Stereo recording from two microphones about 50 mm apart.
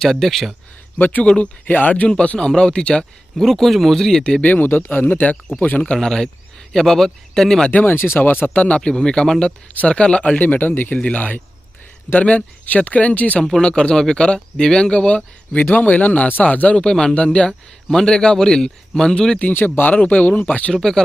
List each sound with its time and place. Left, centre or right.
0.0 s speech: centre
0.9 s a man's voice: left
2.0 s a man's voice: left
3.3 s speech: centre
4.2 s a man's voice: left
4.5 s speech: left
5.8 s a man's voice: centre
7.7 s speech: left
7.9 s speech: left
8.5 s a man's voice: left
8.8 s a man's voice: centre
13.4 s a man's voice: centre
19.5 s speech: left